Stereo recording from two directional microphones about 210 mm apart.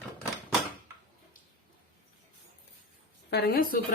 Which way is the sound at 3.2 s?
50° left (ahead or behind).